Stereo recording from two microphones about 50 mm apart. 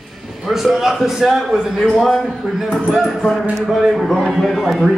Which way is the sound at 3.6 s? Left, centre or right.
Centre.